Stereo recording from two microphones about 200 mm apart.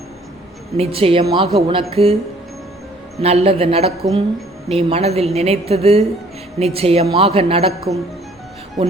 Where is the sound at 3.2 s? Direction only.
30° right (ahead or behind).